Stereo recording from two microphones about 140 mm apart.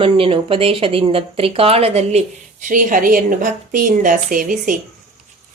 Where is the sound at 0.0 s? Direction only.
40° right (ahead or behind); by 4.8 s 70° right (ahead or behind).